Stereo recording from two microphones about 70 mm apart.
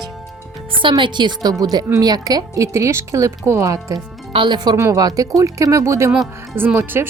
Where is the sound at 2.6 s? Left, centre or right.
Right.